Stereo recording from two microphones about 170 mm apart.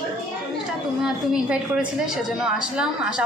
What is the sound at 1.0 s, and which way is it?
A woman's voice, 5° right (ahead or behind).